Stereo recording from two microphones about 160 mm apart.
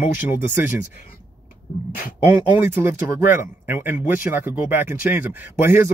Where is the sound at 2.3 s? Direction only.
15° right (ahead or behind).